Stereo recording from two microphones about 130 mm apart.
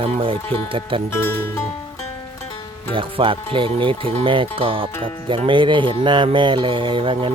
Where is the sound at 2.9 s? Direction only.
45° right (ahead or behind).